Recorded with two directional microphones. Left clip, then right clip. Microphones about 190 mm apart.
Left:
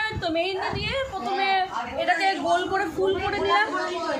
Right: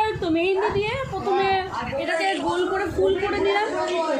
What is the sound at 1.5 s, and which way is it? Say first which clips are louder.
A woman's voice: even; 65° left (ahead or behind).